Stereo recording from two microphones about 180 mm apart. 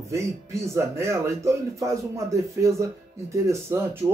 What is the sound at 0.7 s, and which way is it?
Speech, 15° right (ahead or behind).